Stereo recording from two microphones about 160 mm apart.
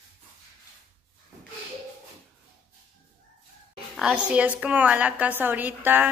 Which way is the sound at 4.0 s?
5° right (ahead or behind).